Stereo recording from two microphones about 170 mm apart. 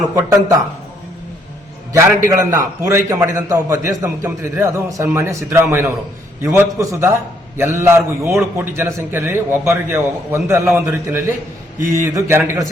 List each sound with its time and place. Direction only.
0.2 s a man's voice: 15° right (ahead or behind)
1.9 s a man's voice: 15° right (ahead or behind)